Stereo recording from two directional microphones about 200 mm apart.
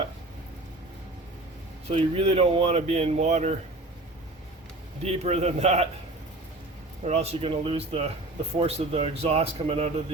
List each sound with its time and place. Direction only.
1.9 s speech: 30° right (ahead or behind)
5.0 s speech: 30° right (ahead or behind)
7.0 s speech: 30° right (ahead or behind)